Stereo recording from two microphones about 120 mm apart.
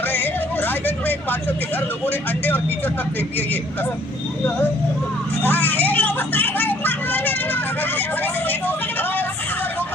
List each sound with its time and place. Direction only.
0.0 s speech: 15° left (ahead or behind)
5.4 s vehicle: 15° left (ahead or behind)